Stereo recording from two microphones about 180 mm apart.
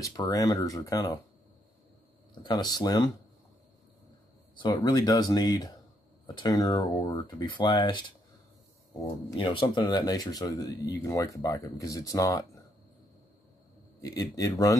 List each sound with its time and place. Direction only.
0.0 s speech: 20° left (ahead or behind)
2.4 s speech: 20° left (ahead or behind)
4.6 s speech: 25° left (ahead or behind)
9.4 s speech: 30° left (ahead or behind)
14.0 s speech: 20° left (ahead or behind)